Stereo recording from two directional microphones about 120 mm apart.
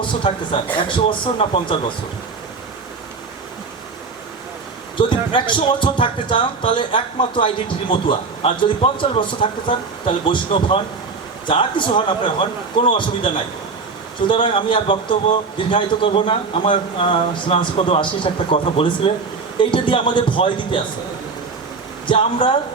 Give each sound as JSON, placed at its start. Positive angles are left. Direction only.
{"t": 0.0, "sound": "speech", "side_deg": 45}
{"t": 4.9, "sound": "speech", "side_deg": 45}
{"t": 22.0, "sound": "speech", "side_deg": 45}